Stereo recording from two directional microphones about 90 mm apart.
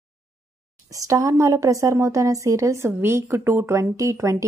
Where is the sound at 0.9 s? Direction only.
40° right (ahead or behind).